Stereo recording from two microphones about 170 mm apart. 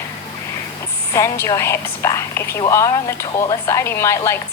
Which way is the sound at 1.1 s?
20° left (ahead or behind).